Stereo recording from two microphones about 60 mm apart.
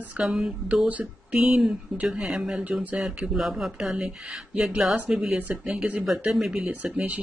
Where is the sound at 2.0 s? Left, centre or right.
Centre.